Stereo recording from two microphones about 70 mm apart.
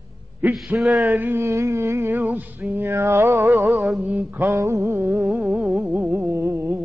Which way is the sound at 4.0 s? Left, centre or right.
Right.